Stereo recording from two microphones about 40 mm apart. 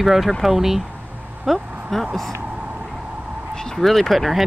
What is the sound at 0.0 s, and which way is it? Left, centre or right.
Speech, centre.